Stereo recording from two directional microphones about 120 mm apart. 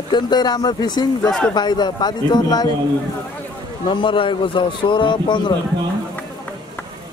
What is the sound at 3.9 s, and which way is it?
A man's voice, 45° left (ahead or behind).